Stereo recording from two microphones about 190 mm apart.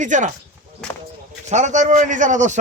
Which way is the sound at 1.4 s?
40° right (ahead or behind).